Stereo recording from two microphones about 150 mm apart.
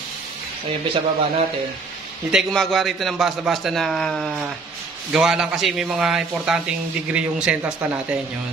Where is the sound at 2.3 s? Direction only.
Centre (ahead or behind).